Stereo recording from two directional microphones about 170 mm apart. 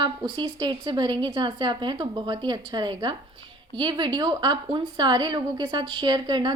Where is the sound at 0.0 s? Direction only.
25° right (ahead or behind).